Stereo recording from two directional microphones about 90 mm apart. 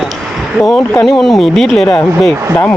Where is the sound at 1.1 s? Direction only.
Centre (ahead or behind).